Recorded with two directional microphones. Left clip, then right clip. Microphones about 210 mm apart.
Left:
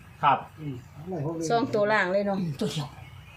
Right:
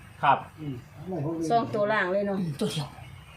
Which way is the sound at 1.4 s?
50° left (ahead or behind).